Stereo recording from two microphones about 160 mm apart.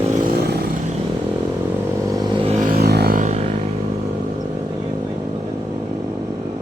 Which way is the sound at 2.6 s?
85° right.